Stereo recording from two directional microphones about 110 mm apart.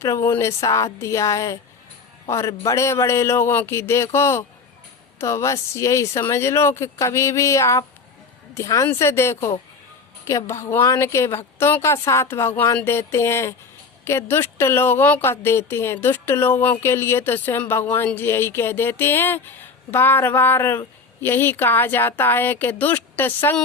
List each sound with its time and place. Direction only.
0.0 s speech: 25° left (ahead or behind)